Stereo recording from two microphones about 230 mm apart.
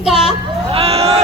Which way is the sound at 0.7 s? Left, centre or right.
Right.